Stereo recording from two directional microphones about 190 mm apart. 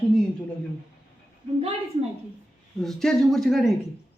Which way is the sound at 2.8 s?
Centre (ahead or behind).